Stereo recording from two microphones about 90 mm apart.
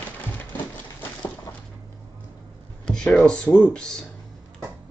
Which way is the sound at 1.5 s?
40° left (ahead or behind).